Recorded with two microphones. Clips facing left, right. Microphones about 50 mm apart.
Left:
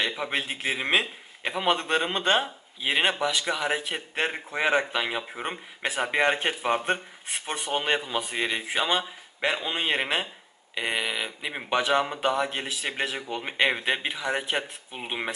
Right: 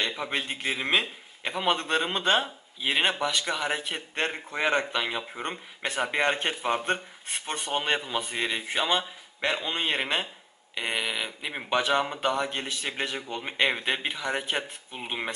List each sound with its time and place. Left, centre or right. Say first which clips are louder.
0.0 s a man's voice: left 2 dB; centre